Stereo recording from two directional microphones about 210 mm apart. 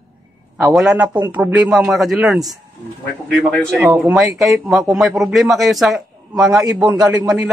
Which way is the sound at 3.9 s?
Centre (ahead or behind).